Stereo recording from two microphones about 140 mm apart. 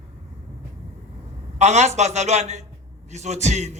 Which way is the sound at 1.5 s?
55° right (ahead or behind).